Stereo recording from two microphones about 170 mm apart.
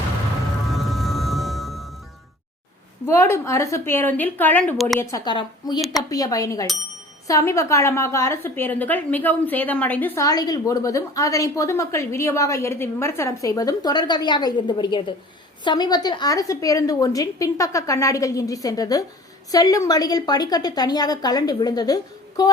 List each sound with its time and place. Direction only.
0.7 s music: centre (ahead or behind)
3.1 s a woman's voice: 15° left (ahead or behind)
4.9 s a woman's voice: 20° left (ahead or behind)